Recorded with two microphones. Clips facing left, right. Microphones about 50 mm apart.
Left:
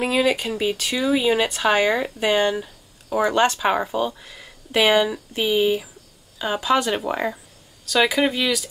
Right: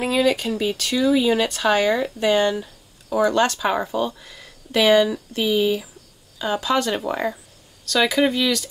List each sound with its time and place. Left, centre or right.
0.0 s speech: centre